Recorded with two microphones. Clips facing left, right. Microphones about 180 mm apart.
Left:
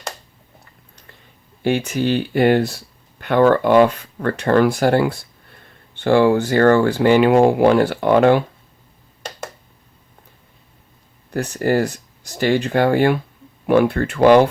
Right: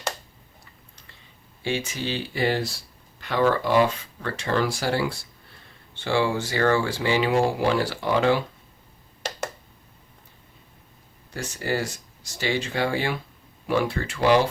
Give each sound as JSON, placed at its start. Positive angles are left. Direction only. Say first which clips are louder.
{"t": 1.6, "sound": "speech", "louder": "left 9 dB", "side_deg": 60}
{"t": 11.3, "sound": "speech", "louder": "left 9 dB", "side_deg": 60}